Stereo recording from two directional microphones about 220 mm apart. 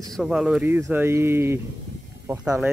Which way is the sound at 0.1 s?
Centre (ahead or behind).